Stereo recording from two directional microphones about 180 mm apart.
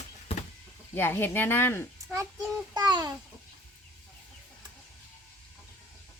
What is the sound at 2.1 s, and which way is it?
Speech, 10° right (ahead or behind).